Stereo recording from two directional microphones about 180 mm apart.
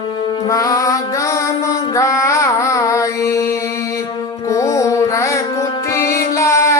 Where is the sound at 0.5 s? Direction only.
20° left (ahead or behind).